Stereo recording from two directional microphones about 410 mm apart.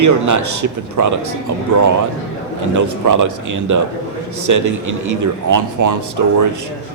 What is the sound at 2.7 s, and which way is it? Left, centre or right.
A man's voice, right.